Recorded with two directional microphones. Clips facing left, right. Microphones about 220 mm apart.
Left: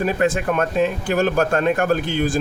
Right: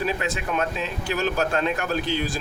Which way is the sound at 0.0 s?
50° left (ahead or behind).